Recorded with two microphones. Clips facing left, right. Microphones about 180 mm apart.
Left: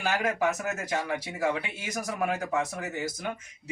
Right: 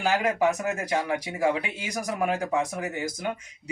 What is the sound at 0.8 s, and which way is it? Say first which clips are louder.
Speech: right 4 dB; 15° right (ahead or behind).